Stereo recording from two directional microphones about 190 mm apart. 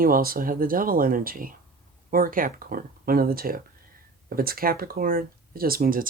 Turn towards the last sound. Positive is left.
turn(degrees=-50)  # may be behind; listen again after turning